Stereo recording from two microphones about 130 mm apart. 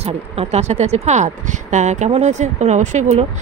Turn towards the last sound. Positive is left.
turn(degrees=-60)  # may be behind; listen again after turning